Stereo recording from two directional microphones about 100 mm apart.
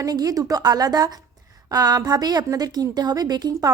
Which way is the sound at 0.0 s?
40° right (ahead or behind).